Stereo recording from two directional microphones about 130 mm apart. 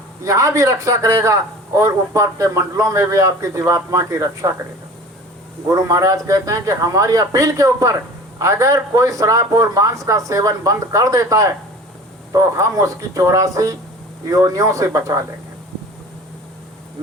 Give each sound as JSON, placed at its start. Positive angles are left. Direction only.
{"t": 0.3, "sound": "a man's voice", "side_deg": -25}
{"t": 5.6, "sound": "a man's voice", "side_deg": -25}